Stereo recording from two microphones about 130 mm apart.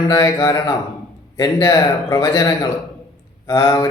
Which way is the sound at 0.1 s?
25° left (ahead or behind).